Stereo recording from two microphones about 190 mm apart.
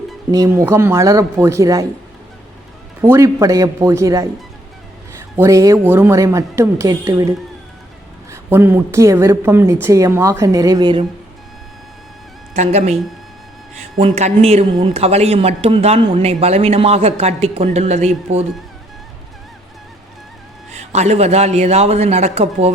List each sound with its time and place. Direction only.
0.3 s speech: 15° right (ahead or behind)
3.0 s speech: 15° right (ahead or behind)
5.4 s speech: 15° right (ahead or behind)
12.5 s a man's voice: 35° right (ahead or behind)
14.0 s a man's voice: 35° right (ahead or behind)
20.7 s a man's voice: 35° right (ahead or behind)